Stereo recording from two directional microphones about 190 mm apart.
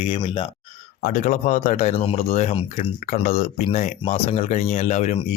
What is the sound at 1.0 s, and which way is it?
Speech, 45° left (ahead or behind).